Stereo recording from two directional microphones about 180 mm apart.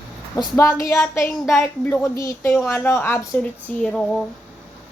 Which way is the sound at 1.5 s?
5° left (ahead or behind).